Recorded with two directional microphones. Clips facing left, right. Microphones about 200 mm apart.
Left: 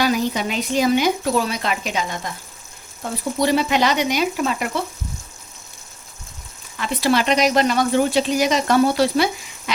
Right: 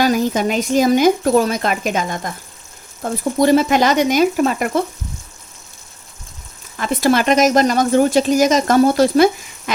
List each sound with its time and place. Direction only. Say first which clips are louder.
0.0 s speech: right 4 dB; 45° right (ahead or behind)
6.7 s speech: right 4 dB; 45° right (ahead or behind)